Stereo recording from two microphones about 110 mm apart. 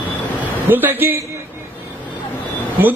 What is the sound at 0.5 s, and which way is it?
Speech, 15° right (ahead or behind).